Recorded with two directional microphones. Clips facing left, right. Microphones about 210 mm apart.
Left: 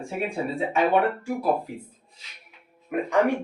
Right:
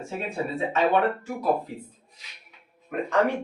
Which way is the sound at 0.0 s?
10° left (ahead or behind).